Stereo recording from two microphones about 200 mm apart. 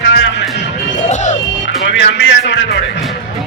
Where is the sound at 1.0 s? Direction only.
35° left (ahead or behind).